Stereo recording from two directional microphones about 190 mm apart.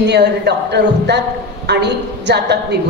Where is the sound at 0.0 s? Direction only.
60° right (ahead or behind).